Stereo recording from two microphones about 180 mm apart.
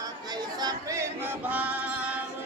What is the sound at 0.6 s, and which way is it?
Choir, 20° right (ahead or behind).